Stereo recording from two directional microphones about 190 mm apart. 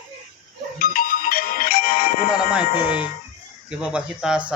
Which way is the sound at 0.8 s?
50° left (ahead or behind).